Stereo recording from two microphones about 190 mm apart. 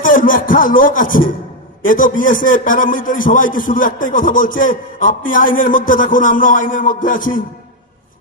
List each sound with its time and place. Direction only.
0.0 s music: 45° left (ahead or behind)
1.8 s a man's voice: 45° left (ahead or behind)